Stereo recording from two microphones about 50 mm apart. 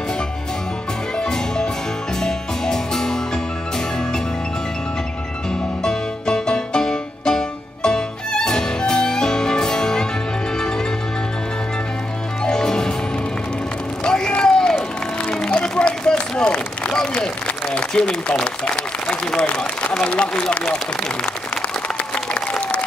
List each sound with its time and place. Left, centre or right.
1.1 s music: centre
5.9 s music: centre
12.4 s music: centre
14.0 s a sound: centre
15.2 s run: centre
17.7 s applause: centre
19.9 s a sound: left
21.8 s applause: left